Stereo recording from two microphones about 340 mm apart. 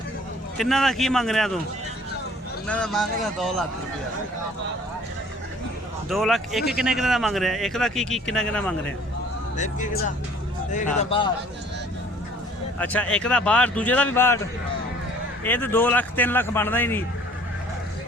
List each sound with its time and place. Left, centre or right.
0.5 s speech: centre
2.6 s speech: centre
6.1 s speech: centre
9.6 s speech: left
12.8 s speech: centre
15.4 s speech: centre